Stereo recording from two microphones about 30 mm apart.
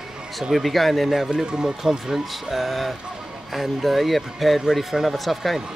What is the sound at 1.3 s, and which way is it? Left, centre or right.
Speech, right.